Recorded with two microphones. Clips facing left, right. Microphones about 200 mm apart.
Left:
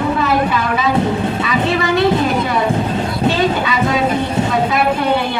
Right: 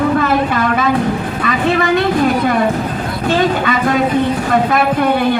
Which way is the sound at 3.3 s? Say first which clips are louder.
Right 2 dB; 50° right (ahead or behind).